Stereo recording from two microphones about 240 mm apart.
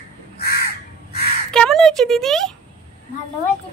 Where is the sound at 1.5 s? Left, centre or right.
Centre.